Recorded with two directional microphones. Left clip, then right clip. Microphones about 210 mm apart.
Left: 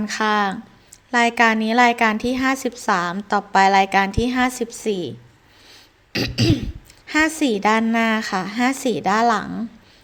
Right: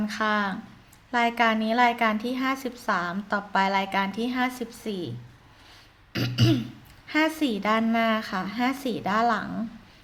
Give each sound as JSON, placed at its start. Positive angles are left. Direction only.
{"t": 0.0, "sound": "a woman's voice", "side_deg": 30}
{"t": 6.1, "sound": "throat clearing", "side_deg": 25}
{"t": 7.1, "sound": "a woman's voice", "side_deg": 30}